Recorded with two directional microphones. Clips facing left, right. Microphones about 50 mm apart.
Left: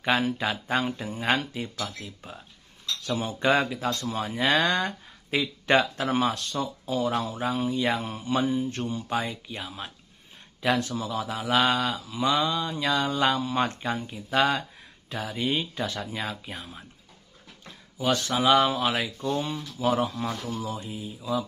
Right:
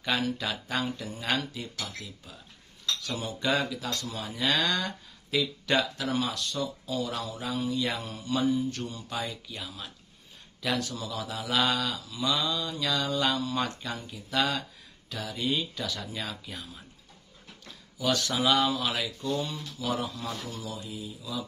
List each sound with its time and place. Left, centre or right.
0.0 s speech: left
17.9 s speech: left